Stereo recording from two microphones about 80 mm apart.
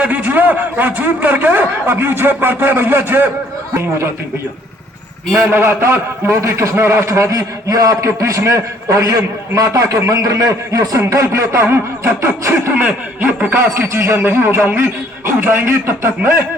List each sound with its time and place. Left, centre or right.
0.0 s a man's voice: right
3.8 s a man's voice: right
5.3 s a man's voice: right
12.8 s a man's voice: right